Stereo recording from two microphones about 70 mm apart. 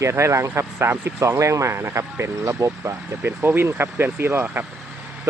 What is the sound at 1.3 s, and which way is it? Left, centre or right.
Speech, right.